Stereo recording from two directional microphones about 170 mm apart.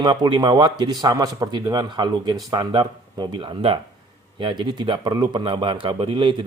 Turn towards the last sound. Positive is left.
turn(degrees=-30)  # may be behind; listen again after turning